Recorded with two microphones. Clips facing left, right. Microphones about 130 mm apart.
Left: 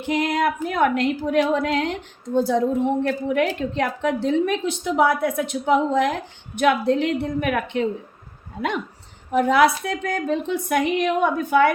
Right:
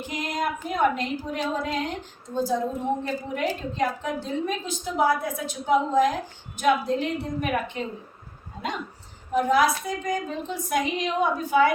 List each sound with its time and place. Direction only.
0.1 s a woman's voice: 65° left (ahead or behind)
9.3 s a woman's voice: 70° left (ahead or behind)